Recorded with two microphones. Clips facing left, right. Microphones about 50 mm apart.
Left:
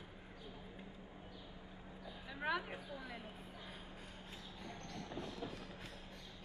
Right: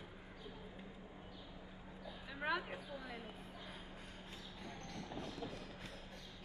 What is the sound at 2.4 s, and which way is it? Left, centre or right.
Speech, centre.